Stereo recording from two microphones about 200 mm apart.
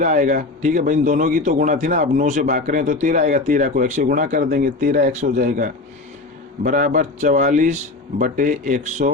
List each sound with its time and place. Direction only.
0.0 s a man's voice: 40° right (ahead or behind)